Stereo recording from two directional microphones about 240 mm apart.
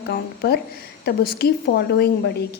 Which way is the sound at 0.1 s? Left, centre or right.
Left.